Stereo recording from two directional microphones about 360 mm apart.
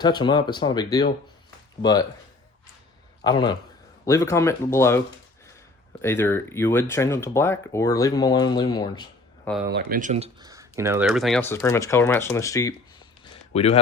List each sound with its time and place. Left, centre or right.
0.0 s speech: centre
3.2 s a man's voice: centre
9.7 s speech: right; by 12.7 s centre
13.2 s a sound: centre